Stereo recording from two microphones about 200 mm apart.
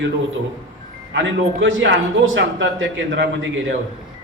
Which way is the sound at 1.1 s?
70° right (ahead or behind).